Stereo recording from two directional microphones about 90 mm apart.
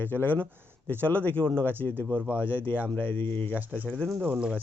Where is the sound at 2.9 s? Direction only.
20° left (ahead or behind).